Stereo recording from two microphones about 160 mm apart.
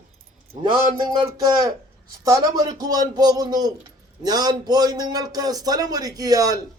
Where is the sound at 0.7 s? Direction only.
25° right (ahead or behind).